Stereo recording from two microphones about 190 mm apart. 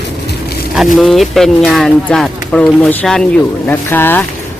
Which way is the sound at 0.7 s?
Centre (ahead or behind).